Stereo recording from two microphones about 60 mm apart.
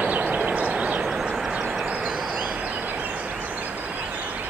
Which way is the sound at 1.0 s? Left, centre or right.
Centre.